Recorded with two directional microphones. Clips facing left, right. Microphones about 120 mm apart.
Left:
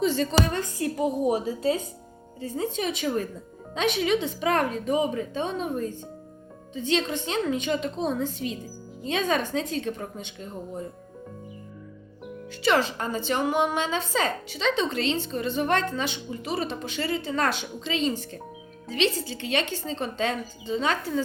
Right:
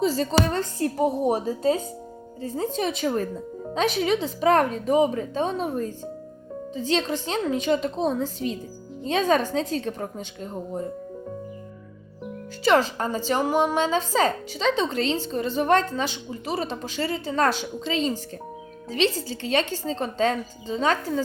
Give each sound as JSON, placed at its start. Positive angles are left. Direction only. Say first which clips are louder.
{"t": 0.0, "sound": "a woman's voice", "louder": "right 1 dB", "side_deg": -35}
{"t": 12.6, "sound": "a woman's voice", "louder": "right 3 dB", "side_deg": -35}